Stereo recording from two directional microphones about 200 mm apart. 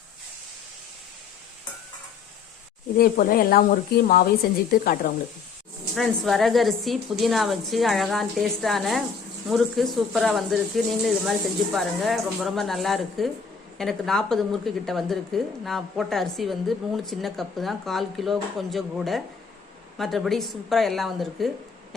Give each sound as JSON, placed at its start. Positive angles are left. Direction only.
{"t": 3.0, "sound": "speech", "side_deg": 45}
{"t": 5.9, "sound": "a woman's voice", "side_deg": 0}